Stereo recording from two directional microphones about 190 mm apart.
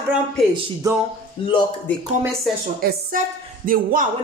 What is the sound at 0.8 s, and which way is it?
Speech, 15° right (ahead or behind).